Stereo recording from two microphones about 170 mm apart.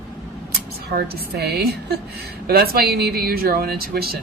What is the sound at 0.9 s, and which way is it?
A woman's voice, 70° right (ahead or behind).